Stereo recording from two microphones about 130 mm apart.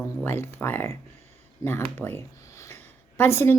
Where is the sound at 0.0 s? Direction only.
15° left (ahead or behind).